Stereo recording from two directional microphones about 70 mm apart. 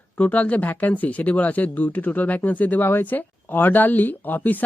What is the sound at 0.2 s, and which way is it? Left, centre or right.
Speech, left.